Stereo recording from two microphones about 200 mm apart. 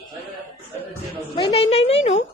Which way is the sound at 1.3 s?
30° left (ahead or behind).